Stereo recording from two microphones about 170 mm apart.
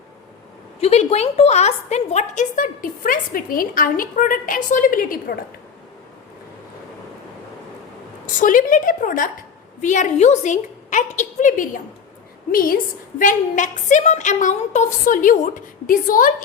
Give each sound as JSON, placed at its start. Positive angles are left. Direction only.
{"t": 0.8, "sound": "a woman's voice", "side_deg": 40}
{"t": 8.4, "sound": "a woman's voice", "side_deg": 50}